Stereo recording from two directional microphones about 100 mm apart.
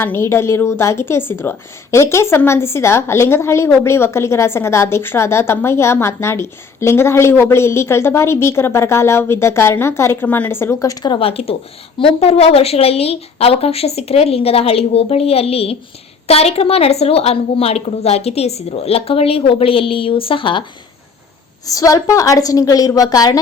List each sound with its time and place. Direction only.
0.0 s a woman's voice: 25° left (ahead or behind)
11.2 s a woman's voice: 70° left (ahead or behind)
16.2 s a woman's voice: 90° left; by 20.7 s 55° left (ahead or behind)
21.7 s a woman's voice: 35° left (ahead or behind)